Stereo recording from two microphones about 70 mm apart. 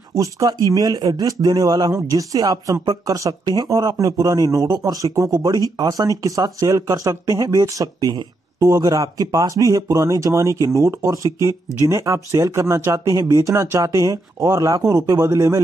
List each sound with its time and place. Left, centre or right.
0.1 s speech: right
0.7 s speech: right
4.6 s speech: right